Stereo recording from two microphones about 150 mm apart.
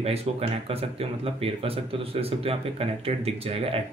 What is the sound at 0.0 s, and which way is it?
A man's voice, 45° right (ahead or behind).